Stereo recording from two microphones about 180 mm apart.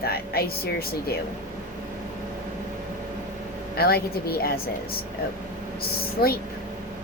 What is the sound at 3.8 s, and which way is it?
Speech, 60° left (ahead or behind).